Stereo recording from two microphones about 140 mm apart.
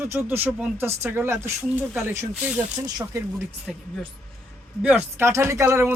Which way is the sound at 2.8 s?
25° right (ahead or behind).